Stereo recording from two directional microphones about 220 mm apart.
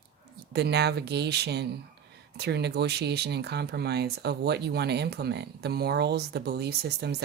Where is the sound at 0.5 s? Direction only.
50° right (ahead or behind).